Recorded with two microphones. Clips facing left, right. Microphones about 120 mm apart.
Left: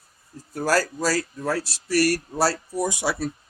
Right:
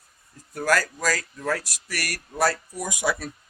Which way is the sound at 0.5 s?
35° left (ahead or behind).